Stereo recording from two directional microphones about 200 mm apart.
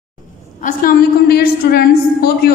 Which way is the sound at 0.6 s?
45° left (ahead or behind).